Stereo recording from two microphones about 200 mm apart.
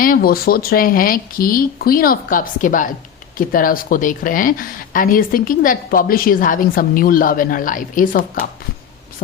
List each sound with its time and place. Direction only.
0.0 s speech: 45° left (ahead or behind)